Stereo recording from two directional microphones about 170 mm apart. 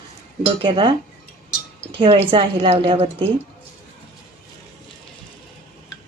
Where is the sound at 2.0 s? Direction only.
30° right (ahead or behind).